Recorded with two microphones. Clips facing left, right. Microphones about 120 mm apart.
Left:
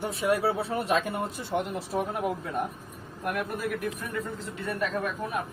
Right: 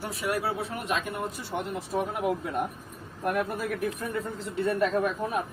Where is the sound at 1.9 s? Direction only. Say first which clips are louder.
Right 5 dB; centre (ahead or behind).